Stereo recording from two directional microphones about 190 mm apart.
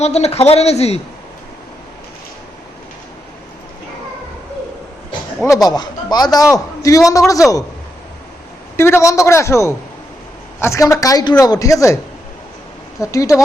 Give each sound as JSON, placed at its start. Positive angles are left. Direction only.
{"t": 0.0, "sound": "speech", "side_deg": 35}
{"t": 5.6, "sound": "a man's voice", "side_deg": 20}
{"t": 8.7, "sound": "a man's voice", "side_deg": 15}
{"t": 13.0, "sound": "a man's voice", "side_deg": 15}